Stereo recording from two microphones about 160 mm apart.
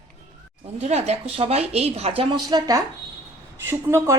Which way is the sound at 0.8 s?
45° right (ahead or behind).